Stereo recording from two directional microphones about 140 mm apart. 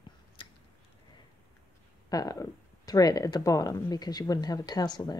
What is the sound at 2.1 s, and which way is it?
Speech, 25° left (ahead or behind).